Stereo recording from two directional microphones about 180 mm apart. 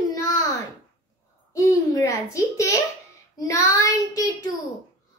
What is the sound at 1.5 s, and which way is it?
A child's voice, 20° left (ahead or behind).